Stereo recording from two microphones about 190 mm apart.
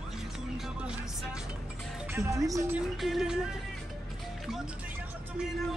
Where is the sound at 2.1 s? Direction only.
15° right (ahead or behind).